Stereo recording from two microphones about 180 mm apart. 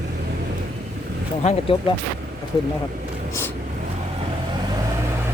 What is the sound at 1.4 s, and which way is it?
Speech, 40° left (ahead or behind).